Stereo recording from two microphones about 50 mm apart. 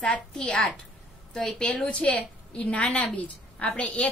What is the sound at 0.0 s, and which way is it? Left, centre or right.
A child's voice, centre.